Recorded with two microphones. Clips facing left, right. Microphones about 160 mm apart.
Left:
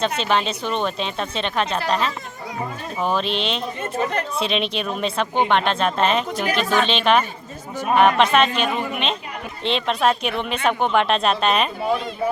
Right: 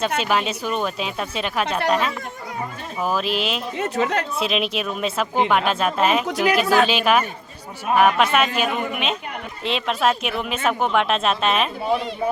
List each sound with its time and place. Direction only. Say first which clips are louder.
0.2 s speech: even; 5° right (ahead or behind)
3.8 s speech: right 5 dB; 80° right
4.4 s speech: even; 5° right (ahead or behind)